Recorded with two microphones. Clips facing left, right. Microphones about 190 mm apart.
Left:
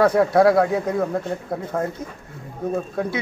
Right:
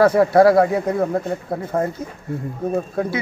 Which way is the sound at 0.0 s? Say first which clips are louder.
Right 3 dB; 5° right (ahead or behind).